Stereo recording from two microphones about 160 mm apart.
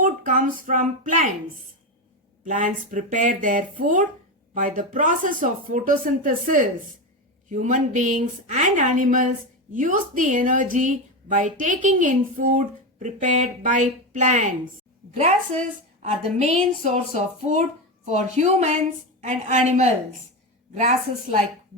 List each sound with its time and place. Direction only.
0.0 s speech: 55° right (ahead or behind)
2.4 s a woman's voice: 55° right (ahead or behind)
16.4 s a woman's voice: 50° right (ahead or behind)